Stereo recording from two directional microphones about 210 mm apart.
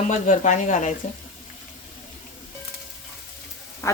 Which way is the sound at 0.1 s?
35° left (ahead or behind).